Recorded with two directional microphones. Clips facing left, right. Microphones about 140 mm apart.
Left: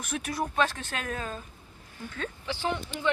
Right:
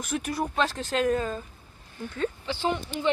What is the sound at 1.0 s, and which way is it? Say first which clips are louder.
Speech: right 9 dB; 20° right (ahead or behind).